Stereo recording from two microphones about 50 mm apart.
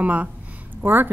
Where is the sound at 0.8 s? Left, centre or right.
Right.